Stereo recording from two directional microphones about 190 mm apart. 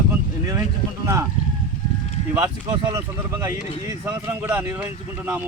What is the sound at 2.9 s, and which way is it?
Speech, 20° right (ahead or behind).